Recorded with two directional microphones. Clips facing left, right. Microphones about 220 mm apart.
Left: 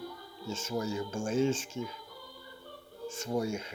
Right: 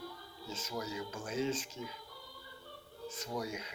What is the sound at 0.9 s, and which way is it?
Speech, 45° left (ahead or behind).